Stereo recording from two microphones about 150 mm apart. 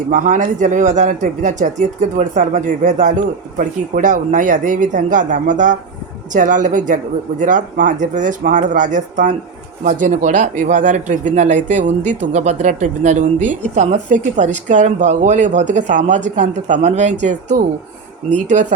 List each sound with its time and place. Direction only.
0.1 s speech: 60° right (ahead or behind)